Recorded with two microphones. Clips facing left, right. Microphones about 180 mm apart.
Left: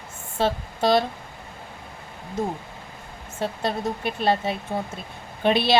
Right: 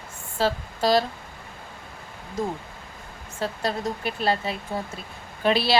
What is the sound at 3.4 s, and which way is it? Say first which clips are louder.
Speech: left 1 dB; 25° left (ahead or behind).